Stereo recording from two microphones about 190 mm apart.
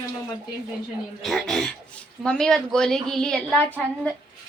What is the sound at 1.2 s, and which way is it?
Speech, centre (ahead or behind).